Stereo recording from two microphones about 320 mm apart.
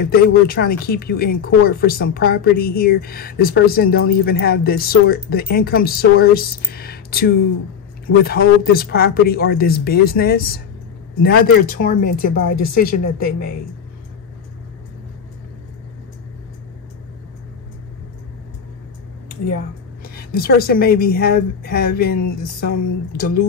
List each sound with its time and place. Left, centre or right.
0.0 s speech: left
12.3 s speech: left
20.0 s speech: left